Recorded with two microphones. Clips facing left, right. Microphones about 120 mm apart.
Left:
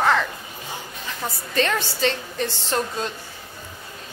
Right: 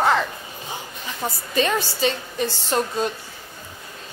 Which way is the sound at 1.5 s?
10° right (ahead or behind).